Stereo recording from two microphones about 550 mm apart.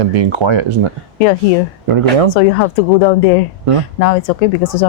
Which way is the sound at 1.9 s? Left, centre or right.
Right.